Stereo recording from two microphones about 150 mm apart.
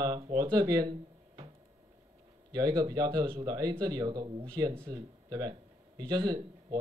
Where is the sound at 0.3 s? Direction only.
30° right (ahead or behind).